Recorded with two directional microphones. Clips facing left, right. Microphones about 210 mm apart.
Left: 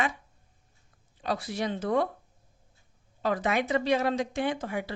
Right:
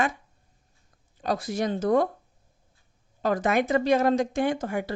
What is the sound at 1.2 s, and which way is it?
Speech, 45° right (ahead or behind).